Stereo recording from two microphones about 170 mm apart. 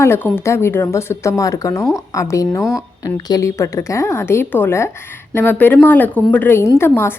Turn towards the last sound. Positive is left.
turn(degrees=15)  # may be behind; listen again after turning